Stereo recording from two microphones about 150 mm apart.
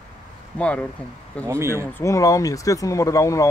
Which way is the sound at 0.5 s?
10° left (ahead or behind).